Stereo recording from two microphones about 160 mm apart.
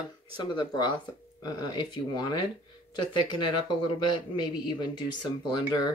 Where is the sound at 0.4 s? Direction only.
25° left (ahead or behind).